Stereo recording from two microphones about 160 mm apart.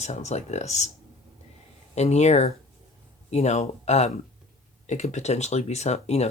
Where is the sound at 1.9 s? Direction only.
45° left (ahead or behind).